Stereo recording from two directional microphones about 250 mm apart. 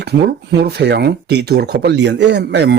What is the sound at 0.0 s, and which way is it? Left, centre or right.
Speech, right.